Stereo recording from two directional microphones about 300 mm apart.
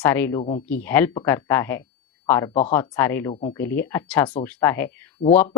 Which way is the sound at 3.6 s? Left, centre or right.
Centre.